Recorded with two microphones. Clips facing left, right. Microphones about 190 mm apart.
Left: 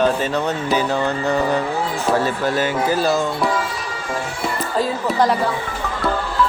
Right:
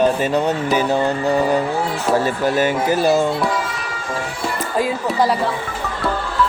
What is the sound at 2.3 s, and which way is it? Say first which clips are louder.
Speech: right 2 dB; 15° right (ahead or behind).